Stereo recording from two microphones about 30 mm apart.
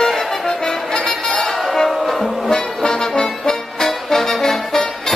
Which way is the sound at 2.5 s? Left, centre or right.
Left.